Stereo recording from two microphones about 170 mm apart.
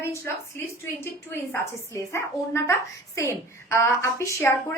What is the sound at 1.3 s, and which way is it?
A woman's voice, 15° left (ahead or behind).